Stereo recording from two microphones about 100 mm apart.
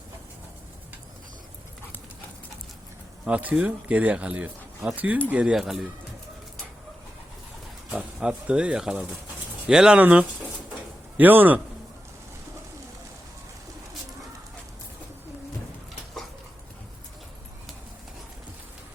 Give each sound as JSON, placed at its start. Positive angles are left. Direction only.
{"t": 3.2, "sound": "speech", "side_deg": -10}
{"t": 7.9, "sound": "speech", "side_deg": -10}